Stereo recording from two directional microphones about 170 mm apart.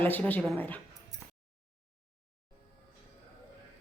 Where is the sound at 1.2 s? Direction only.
5° left (ahead or behind).